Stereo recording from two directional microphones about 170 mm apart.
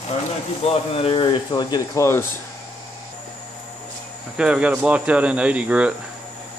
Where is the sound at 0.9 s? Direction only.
35° left (ahead or behind); by 2.3 s 15° left (ahead or behind).